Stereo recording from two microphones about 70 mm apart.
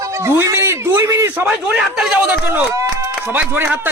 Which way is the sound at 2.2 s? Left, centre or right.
Right.